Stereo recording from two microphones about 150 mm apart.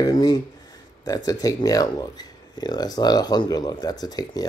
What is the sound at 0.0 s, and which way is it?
Speech, 25° left (ahead or behind).